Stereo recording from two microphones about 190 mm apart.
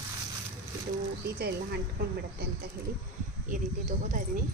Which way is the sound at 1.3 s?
60° right (ahead or behind).